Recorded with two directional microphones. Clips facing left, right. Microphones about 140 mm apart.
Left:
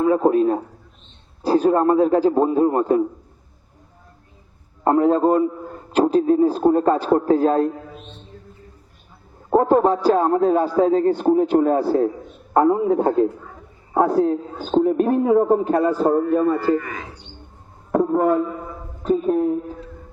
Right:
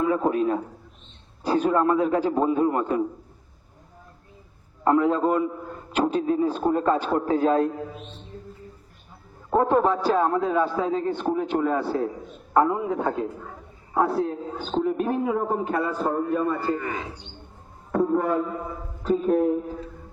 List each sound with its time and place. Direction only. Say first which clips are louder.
0.0 s a man's voice: left 6 dB; 35° left (ahead or behind)
4.8 s a man's voice: left 4 dB; 35° left (ahead or behind)
9.5 s a man's voice: left 5 dB; 30° left (ahead or behind)
16.7 s speech: left 5 dB; 30° right (ahead or behind)
17.9 s speech: left 5 dB; 40° left (ahead or behind)